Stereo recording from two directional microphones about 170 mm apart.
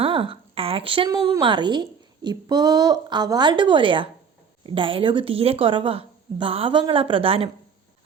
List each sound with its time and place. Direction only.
0.0 s a woman's voice: 30° right (ahead or behind)